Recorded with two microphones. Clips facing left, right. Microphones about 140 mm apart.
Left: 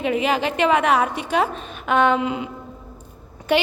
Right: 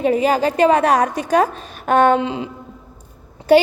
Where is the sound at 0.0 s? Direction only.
40° right (ahead or behind).